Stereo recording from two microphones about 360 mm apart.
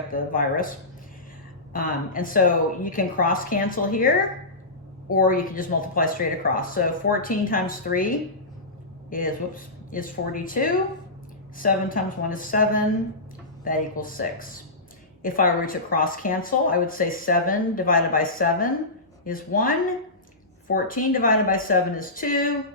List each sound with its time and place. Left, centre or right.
0.1 s speech: left
1.7 s speech: left
5.1 s speech: left